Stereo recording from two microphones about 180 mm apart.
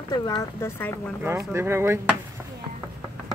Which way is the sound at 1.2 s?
15° right (ahead or behind).